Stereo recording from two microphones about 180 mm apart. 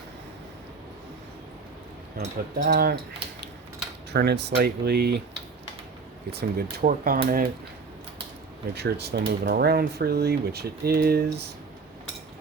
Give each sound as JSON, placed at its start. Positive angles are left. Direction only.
{"t": 2.2, "sound": "speech", "side_deg": -55}
{"t": 4.1, "sound": "speech", "side_deg": -65}
{"t": 6.3, "sound": "speech", "side_deg": -60}
{"t": 8.7, "sound": "speech", "side_deg": -65}